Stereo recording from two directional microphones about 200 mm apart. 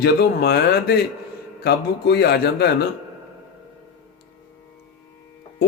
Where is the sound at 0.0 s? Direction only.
55° left (ahead or behind).